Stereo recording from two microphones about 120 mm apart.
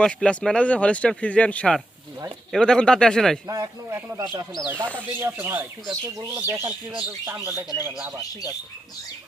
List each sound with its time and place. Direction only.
0.0 s speech: 5° left (ahead or behind)
3.4 s speech: 30° right (ahead or behind)